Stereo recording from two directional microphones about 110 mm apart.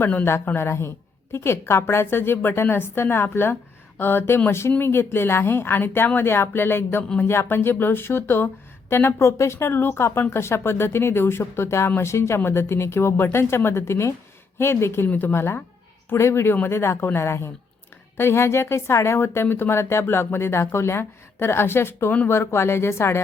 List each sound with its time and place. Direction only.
0.0 s speech: 20° left (ahead or behind)
22.4 s speech: 25° left (ahead or behind)